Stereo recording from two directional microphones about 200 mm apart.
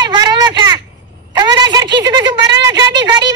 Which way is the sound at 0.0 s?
20° right (ahead or behind).